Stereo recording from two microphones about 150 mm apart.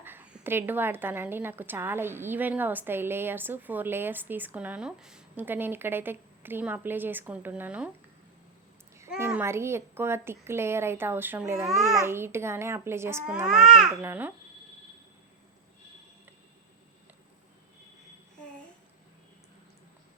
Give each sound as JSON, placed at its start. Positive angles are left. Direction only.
{"t": 0.0, "sound": "a woman's voice", "side_deg": -10}
{"t": 9.1, "sound": "a woman's voice", "side_deg": -15}
{"t": 11.7, "sound": "a child's voice", "side_deg": 0}
{"t": 11.9, "sound": "a woman's voice", "side_deg": -15}
{"t": 13.4, "sound": "a child's voice", "side_deg": -5}